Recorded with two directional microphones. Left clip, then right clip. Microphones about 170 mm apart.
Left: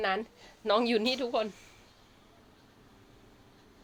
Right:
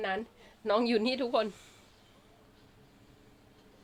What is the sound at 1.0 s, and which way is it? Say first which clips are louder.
Speech: even; 25° right (ahead or behind).